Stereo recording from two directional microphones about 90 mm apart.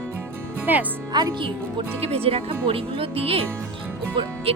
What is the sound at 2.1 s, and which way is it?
Speech, 90° right.